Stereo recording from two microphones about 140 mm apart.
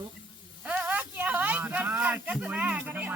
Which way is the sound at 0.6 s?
10° right (ahead or behind).